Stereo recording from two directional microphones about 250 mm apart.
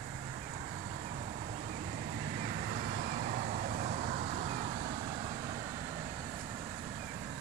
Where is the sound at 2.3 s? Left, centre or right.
Right.